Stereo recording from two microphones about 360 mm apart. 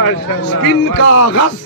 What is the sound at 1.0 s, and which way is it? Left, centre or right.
Speech, left.